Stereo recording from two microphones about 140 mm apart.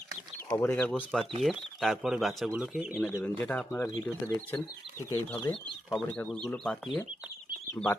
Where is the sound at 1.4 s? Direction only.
Centre (ahead or behind).